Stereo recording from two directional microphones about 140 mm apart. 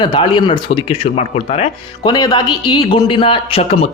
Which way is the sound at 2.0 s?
30° left (ahead or behind).